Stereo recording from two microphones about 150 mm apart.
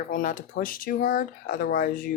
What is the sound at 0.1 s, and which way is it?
Speech, 65° left (ahead or behind).